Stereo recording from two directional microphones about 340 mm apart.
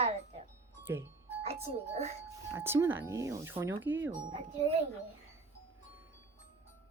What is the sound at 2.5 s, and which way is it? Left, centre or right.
Speech, centre.